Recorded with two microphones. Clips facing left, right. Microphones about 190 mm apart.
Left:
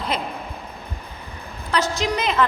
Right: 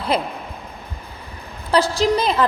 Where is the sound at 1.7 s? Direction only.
30° right (ahead or behind).